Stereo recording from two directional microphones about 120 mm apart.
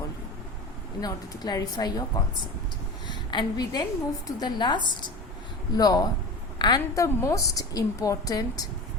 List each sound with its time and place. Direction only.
1.0 s a woman's voice: 35° left (ahead or behind)
3.1 s a woman's voice: 35° left (ahead or behind)